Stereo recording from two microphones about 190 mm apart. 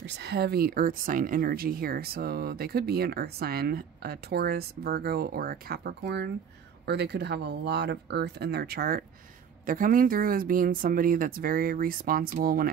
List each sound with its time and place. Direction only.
0.0 s speech: 60° right (ahead or behind)